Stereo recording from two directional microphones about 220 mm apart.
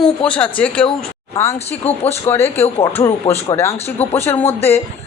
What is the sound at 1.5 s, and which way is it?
Speech, 30° left (ahead or behind).